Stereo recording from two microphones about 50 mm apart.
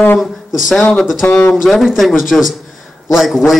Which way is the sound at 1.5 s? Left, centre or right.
Centre.